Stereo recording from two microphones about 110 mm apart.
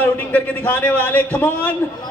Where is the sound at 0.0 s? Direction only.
15° left (ahead or behind).